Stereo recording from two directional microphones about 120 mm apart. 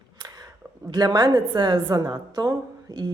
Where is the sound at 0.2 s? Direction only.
30° right (ahead or behind).